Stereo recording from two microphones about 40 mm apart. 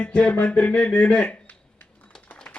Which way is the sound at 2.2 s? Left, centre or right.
Left.